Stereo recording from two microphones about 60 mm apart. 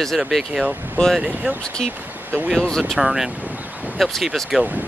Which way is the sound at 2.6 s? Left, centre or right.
Centre.